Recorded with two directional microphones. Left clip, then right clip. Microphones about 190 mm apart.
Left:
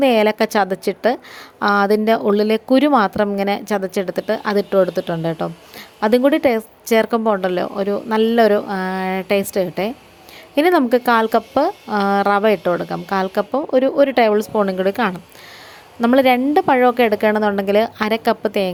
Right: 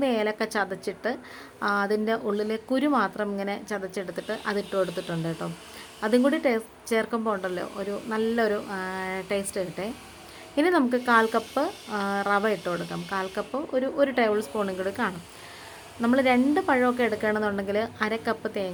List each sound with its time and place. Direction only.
0.0 s a woman's voice: 35° left (ahead or behind)